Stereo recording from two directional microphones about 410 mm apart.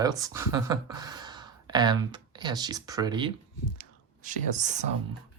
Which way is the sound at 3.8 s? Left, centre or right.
Centre.